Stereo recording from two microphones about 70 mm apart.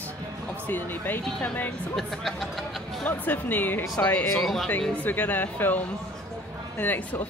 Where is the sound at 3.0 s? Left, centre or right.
Left.